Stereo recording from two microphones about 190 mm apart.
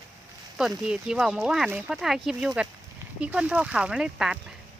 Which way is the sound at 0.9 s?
5° right (ahead or behind).